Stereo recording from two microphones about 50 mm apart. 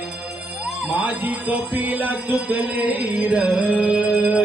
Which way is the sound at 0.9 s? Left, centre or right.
Right.